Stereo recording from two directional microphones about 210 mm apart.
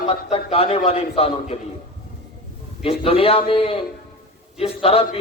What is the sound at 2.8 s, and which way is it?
A man's voice, 25° left (ahead or behind).